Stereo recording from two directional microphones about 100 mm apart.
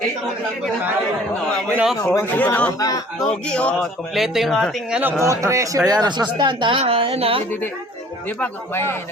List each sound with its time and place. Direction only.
2.1 s speech: 20° left (ahead or behind)
2.7 s speech: 40° left (ahead or behind)
3.2 s speech: 10° left (ahead or behind)
4.1 s speech: centre (ahead or behind)
4.9 s a man's voice: 15° right (ahead or behind)
5.2 s a man's voice: 30° right (ahead or behind)
5.9 s speech: 45° right (ahead or behind); by 7.4 s 80° right
8.7 s speech: 25° left (ahead or behind)